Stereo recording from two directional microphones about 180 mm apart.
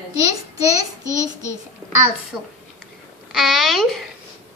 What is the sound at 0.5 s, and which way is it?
Child singing, 20° right (ahead or behind).